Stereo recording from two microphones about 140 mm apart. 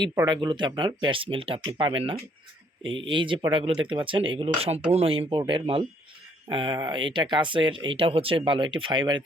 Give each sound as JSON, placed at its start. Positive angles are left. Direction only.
{"t": 0.3, "sound": "speech", "side_deg": -35}
{"t": 5.4, "sound": "speech", "side_deg": -35}